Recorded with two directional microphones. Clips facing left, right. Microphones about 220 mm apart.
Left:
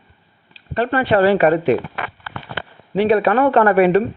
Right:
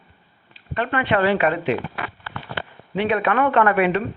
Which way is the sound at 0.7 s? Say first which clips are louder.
Left 5 dB; 35° left (ahead or behind).